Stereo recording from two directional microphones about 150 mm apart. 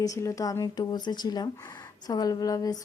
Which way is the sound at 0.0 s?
20° left (ahead or behind).